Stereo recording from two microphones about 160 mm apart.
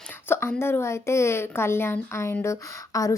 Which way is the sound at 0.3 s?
15° left (ahead or behind).